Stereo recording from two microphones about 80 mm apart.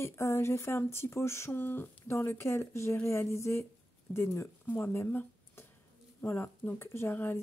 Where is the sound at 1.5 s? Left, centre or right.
Left.